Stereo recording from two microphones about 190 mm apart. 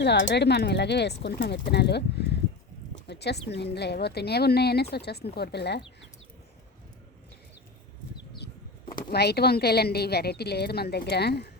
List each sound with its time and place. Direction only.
0.0 s a woman's voice: 65° left (ahead or behind)
9.0 s a woman's voice: 60° left (ahead or behind)